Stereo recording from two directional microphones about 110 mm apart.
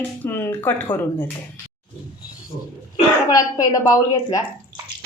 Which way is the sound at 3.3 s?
30° left (ahead or behind).